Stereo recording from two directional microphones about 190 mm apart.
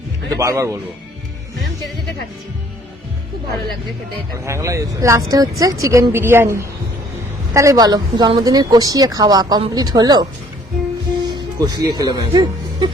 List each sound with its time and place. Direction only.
0.3 s a woman's voice: 15° right (ahead or behind)
4.4 s a woman's voice: 15° right (ahead or behind)
11.3 s speech: 20° right (ahead or behind)